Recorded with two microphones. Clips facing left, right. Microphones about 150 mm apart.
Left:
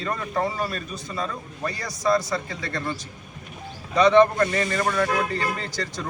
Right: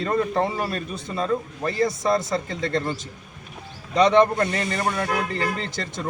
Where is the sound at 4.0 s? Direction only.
20° right (ahead or behind).